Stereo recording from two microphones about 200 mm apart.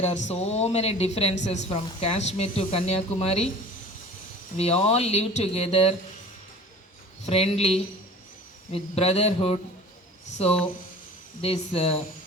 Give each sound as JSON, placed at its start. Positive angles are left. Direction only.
{"t": 0.0, "sound": "speech", "side_deg": 35}
{"t": 4.5, "sound": "speech", "side_deg": 30}
{"t": 7.3, "sound": "speech", "side_deg": 30}